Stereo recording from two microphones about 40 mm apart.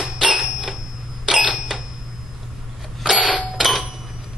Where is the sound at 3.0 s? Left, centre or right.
Centre.